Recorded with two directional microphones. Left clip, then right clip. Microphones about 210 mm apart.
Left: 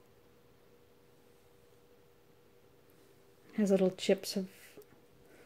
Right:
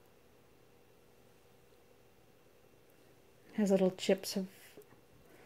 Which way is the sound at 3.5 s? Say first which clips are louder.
Left 1 dB; 5° left (ahead or behind).